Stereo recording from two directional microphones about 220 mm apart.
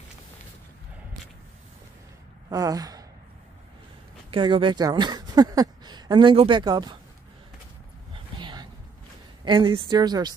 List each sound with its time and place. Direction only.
2.5 s gasp: 15° right (ahead or behind)
4.3 s speech: 20° right (ahead or behind)
8.1 s a sound: 20° right (ahead or behind)
9.4 s a woman's voice: 20° right (ahead or behind)